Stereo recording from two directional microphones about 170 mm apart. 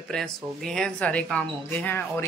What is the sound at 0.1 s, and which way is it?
A woman's voice, centre (ahead or behind).